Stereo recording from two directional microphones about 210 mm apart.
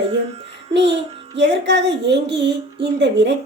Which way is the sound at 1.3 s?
55° right (ahead or behind).